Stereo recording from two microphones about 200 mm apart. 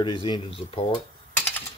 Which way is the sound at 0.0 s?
25° left (ahead or behind).